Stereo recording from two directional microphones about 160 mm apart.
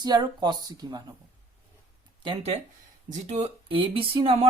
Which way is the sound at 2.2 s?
35° right (ahead or behind).